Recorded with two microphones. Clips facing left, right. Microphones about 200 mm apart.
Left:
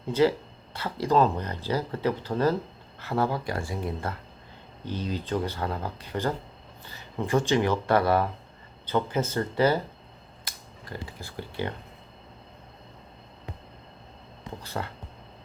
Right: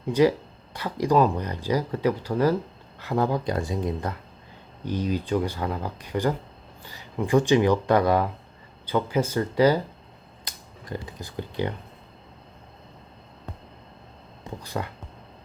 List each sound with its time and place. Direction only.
0.1 s speech: 15° right (ahead or behind)
10.4 s finger snapping: 20° right (ahead or behind)
14.6 s speech: 15° right (ahead or behind)